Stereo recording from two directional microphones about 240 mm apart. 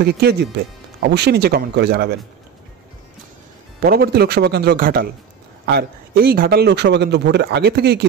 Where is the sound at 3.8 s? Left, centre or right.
Right.